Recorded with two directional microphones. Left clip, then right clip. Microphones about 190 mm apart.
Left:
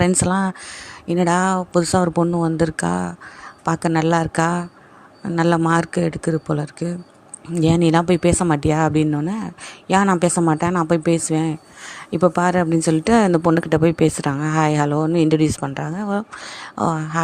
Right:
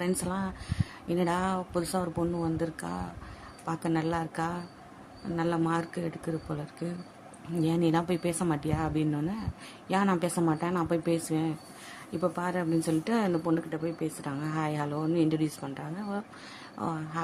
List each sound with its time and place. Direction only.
0.0 s a woman's voice: 45° left (ahead or behind)